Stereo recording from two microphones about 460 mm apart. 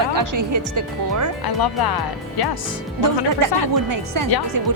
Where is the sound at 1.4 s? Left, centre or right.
Left.